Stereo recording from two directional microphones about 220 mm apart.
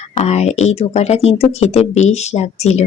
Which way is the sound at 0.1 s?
30° left (ahead or behind).